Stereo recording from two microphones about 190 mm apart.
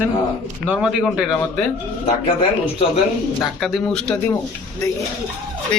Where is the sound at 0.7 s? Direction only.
5° right (ahead or behind).